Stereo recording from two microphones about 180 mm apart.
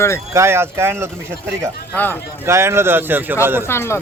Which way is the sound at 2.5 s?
15° right (ahead or behind).